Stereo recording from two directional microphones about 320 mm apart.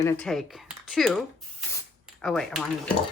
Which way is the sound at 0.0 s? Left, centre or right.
Centre.